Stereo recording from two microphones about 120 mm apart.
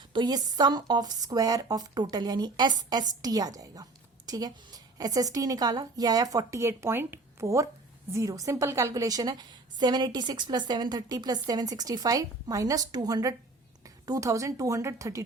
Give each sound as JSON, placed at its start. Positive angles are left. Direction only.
{"t": 0.1, "sound": "a woman's voice", "side_deg": -35}